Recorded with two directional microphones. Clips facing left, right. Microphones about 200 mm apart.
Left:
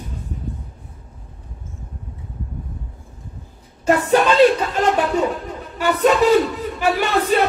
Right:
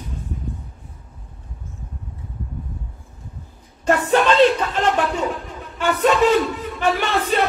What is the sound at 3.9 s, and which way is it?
Speech, 40° left (ahead or behind).